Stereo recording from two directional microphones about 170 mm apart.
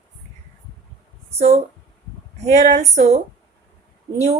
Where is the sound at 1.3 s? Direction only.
40° right (ahead or behind).